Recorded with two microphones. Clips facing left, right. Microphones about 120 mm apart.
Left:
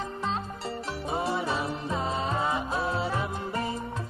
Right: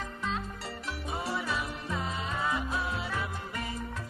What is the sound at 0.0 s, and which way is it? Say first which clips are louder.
Music: left 4 dB; 30° left (ahead or behind).